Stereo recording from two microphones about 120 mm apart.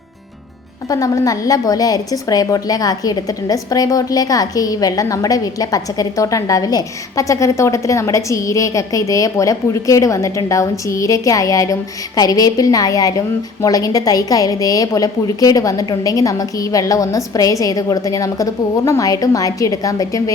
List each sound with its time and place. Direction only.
0.9 s a woman's voice: 30° left (ahead or behind)